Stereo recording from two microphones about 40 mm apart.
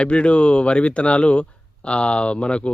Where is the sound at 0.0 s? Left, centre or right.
Left.